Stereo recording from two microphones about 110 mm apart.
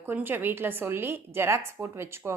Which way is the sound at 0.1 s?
20° right (ahead or behind).